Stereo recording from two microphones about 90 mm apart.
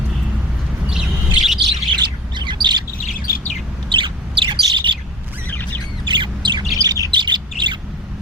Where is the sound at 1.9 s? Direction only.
55° right (ahead or behind).